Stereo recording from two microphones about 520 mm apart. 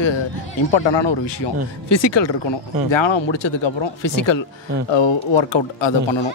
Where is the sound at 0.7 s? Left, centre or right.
Left.